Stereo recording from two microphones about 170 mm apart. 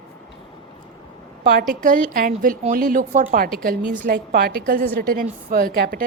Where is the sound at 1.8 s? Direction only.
50° right (ahead or behind).